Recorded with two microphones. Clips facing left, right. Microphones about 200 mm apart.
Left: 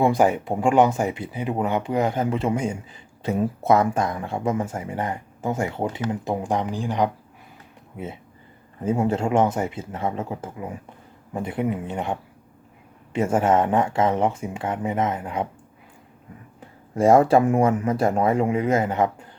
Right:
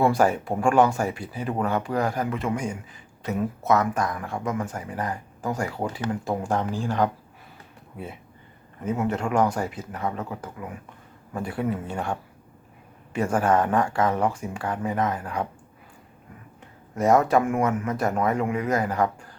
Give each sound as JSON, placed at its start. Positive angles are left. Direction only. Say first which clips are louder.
{"t": 0.0, "sound": "speech", "louder": "left 2 dB", "side_deg": 20}
{"t": 16.6, "sound": "speech", "louder": "left 5 dB", "side_deg": 30}